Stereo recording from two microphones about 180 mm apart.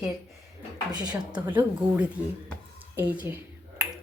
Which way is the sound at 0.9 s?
20° right (ahead or behind).